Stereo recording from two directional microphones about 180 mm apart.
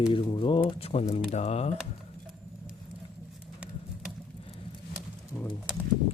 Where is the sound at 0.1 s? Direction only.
30° left (ahead or behind).